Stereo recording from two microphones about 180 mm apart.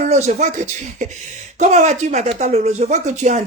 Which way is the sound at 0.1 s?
40° right (ahead or behind).